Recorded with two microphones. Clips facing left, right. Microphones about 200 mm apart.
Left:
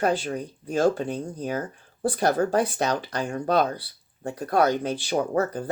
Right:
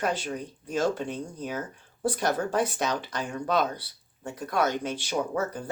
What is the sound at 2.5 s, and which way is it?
Speech, 35° left (ahead or behind).